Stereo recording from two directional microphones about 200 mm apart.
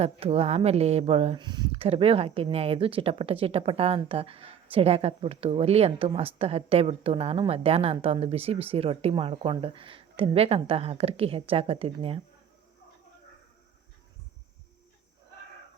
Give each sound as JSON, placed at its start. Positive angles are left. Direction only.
{"t": 0.0, "sound": "speech", "side_deg": -30}